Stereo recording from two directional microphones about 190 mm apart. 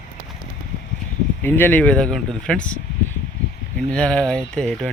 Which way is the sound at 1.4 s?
10° left (ahead or behind).